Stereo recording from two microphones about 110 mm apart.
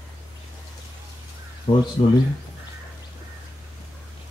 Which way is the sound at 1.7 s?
60° left (ahead or behind).